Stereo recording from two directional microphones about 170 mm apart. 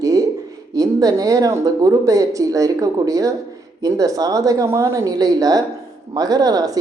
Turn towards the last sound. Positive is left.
turn(degrees=-20)  # may be behind; listen again after turning